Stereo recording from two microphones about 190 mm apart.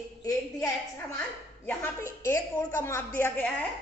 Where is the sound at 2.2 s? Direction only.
15° left (ahead or behind).